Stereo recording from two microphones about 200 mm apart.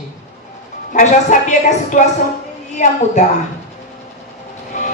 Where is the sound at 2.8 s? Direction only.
40° left (ahead or behind).